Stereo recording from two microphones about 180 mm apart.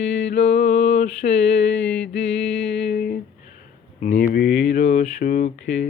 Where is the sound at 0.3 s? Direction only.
40° left (ahead or behind).